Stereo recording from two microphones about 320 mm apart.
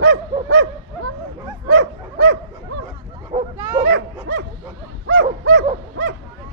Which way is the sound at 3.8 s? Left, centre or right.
Right.